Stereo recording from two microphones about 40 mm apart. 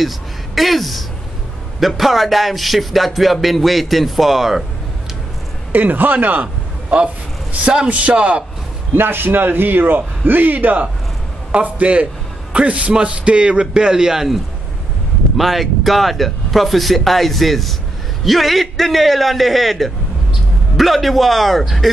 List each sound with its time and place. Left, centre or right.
0.6 s speech: centre
5.7 s speech: right
6.4 s a sound: right
7.9 s a man's voice: right
8.9 s a man's voice: right
11.5 s a man's voice: right; by 21.8 s centre